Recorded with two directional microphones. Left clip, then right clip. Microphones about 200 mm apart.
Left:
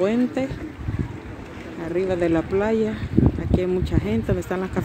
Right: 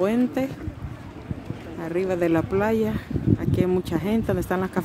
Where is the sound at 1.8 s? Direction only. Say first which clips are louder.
Left 1 dB; 10° right (ahead or behind).